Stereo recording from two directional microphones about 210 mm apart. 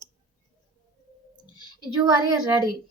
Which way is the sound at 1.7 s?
20° right (ahead or behind).